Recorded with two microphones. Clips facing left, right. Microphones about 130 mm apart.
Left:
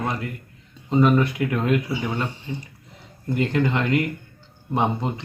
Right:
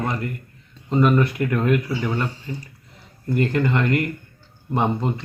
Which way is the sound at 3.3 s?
Centre (ahead or behind).